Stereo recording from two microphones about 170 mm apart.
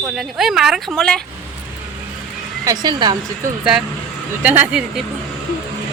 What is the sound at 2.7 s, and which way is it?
Speech, 25° right (ahead or behind).